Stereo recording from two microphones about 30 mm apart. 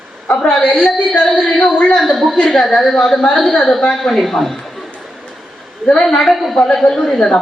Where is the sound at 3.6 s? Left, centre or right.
Centre.